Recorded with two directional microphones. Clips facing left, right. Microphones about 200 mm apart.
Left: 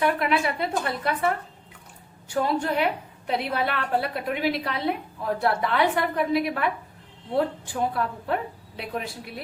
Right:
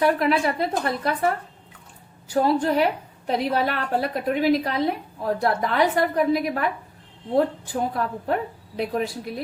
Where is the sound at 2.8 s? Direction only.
40° right (ahead or behind).